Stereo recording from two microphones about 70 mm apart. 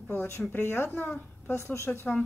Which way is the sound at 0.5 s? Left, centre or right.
Left.